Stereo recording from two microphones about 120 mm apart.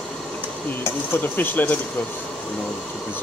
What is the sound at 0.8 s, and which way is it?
Speech, 15° left (ahead or behind).